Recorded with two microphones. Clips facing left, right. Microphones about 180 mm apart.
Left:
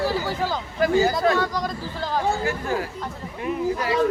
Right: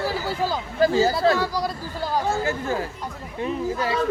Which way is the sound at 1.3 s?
5° right (ahead or behind).